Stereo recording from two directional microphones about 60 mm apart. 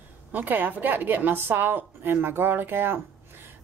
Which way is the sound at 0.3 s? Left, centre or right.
Right.